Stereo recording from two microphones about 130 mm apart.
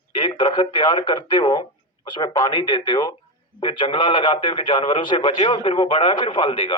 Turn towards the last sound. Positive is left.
turn(degrees=40)  # may be behind; listen again after turning